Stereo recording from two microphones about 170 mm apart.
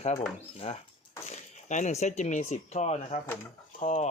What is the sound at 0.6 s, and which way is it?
Speech, 35° left (ahead or behind).